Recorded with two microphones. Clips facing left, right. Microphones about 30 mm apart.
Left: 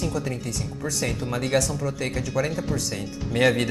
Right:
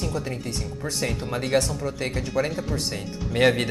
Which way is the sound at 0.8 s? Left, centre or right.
Right.